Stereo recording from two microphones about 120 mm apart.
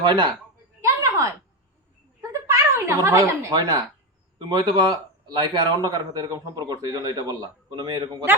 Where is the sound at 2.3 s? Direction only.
20° right (ahead or behind).